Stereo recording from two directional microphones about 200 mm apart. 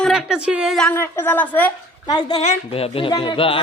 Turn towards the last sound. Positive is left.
turn(degrees=25)  # may be behind; listen again after turning